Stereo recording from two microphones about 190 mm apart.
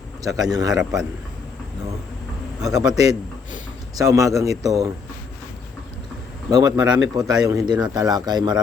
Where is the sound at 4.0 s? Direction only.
15° right (ahead or behind).